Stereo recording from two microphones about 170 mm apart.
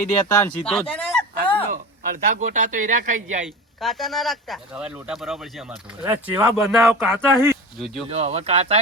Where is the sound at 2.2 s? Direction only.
50° right (ahead or behind).